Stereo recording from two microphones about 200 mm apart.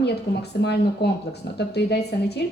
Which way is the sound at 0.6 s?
55° left (ahead or behind).